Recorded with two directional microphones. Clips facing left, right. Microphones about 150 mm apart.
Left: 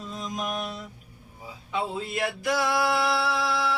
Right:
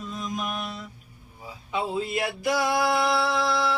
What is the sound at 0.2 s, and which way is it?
Mantra, 35° left (ahead or behind).